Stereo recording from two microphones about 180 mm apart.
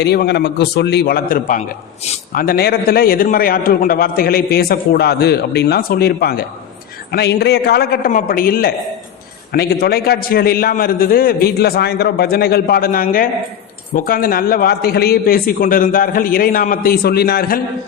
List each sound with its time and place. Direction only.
0.0 s a man's voice: 65° left (ahead or behind)